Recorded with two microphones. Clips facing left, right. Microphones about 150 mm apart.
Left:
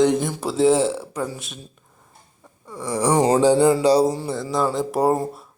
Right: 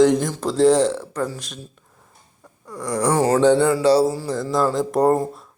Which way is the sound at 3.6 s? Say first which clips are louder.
Even; 20° left (ahead or behind).